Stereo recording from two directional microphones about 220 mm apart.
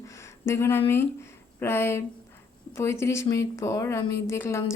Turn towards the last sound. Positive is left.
turn(degrees=10)  # may be behind; listen again after turning